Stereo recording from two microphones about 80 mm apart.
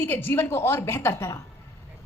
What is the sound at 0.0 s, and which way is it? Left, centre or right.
A woman's voice, left.